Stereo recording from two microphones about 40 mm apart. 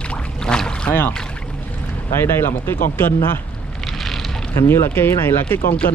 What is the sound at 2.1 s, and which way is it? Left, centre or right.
Speech, left.